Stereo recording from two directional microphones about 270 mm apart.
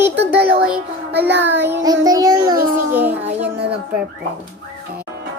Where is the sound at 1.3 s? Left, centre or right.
Right.